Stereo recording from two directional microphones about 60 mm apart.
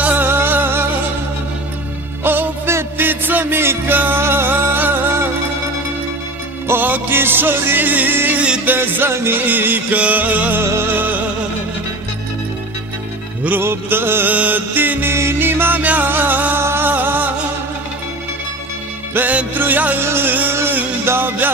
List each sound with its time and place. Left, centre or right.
0.0 s music: right
2.2 s music: right
6.7 s music: right
10.6 s music: right
13.6 s music: right
14.3 s music: right
16.5 s music: right
16.9 s music: right
19.1 s music: right
20.0 s music: right